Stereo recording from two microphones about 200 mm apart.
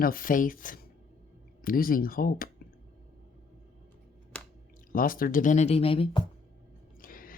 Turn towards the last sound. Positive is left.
turn(degrees=45)  # may be behind; listen again after turning